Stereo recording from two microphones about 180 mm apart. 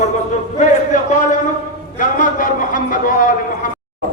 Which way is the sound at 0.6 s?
45° left (ahead or behind).